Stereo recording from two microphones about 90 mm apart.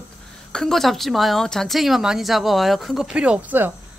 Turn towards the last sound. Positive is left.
turn(degrees=-20)  # may be behind; listen again after turning